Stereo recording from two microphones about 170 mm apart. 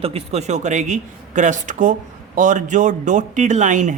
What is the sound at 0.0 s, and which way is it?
A man's voice, 35° right (ahead or behind).